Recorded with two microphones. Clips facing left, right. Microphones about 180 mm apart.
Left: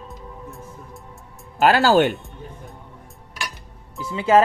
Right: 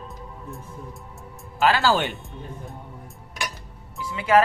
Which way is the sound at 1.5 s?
45° left (ahead or behind).